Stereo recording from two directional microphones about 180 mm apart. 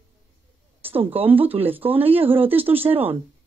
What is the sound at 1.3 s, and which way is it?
Speech, 30° right (ahead or behind).